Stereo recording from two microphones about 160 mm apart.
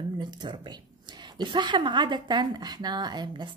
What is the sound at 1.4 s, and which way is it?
A woman's voice, 30° right (ahead or behind).